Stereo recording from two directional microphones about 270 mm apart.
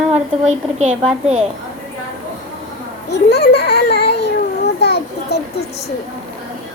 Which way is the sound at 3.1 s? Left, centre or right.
Left.